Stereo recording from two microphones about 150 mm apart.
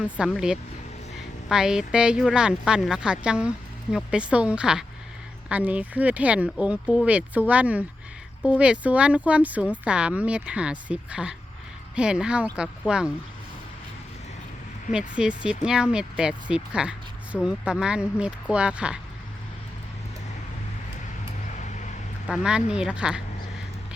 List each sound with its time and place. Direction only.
0.3 s speech: 5° right (ahead or behind)
14.9 s speech: 5° right (ahead or behind)
21.6 s vehicle: 55° left (ahead or behind)
22.3 s speech: 5° right (ahead or behind)